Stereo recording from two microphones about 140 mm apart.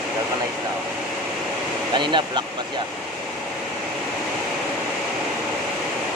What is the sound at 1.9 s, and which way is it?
Speech, 35° right (ahead or behind).